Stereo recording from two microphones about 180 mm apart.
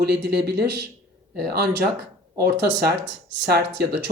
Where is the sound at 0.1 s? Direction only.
60° right (ahead or behind).